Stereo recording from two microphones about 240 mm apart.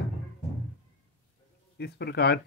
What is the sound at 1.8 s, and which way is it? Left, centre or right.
Speech, left.